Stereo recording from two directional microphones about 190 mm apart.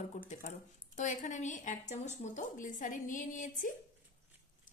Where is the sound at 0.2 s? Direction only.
50° left (ahead or behind).